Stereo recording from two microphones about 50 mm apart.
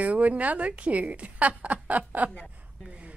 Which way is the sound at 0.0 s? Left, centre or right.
Right.